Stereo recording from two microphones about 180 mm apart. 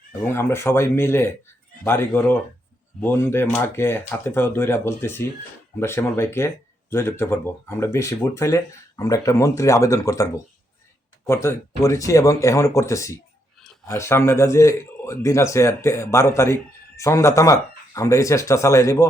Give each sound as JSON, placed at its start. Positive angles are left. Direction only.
{"t": 0.2, "sound": "speech", "side_deg": 15}